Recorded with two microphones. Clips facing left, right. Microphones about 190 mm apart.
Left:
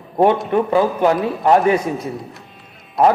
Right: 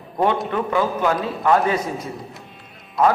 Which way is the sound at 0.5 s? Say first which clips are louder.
Left 5 dB; 30° left (ahead or behind).